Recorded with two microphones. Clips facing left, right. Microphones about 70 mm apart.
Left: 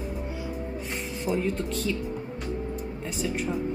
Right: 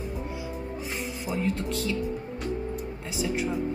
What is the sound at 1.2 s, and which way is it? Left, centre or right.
Music, centre.